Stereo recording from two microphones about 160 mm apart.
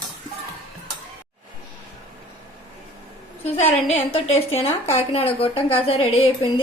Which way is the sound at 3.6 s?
40° left (ahead or behind).